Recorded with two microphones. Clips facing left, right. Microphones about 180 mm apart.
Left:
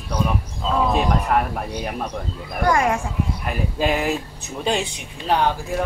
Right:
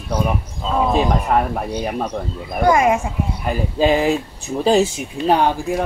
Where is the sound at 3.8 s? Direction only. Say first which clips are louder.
Right 6 dB; 30° right (ahead or behind).